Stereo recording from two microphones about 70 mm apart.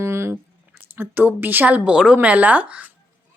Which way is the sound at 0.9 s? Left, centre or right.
Right.